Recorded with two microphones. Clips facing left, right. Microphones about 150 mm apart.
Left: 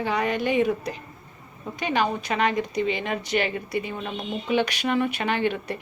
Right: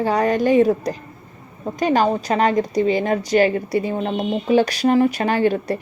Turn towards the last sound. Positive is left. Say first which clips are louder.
# right 7 dB
turn(degrees=-40)  # may be behind; listen again after turning